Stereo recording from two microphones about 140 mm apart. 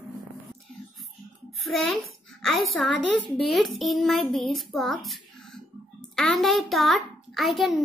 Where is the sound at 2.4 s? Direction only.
Centre (ahead or behind).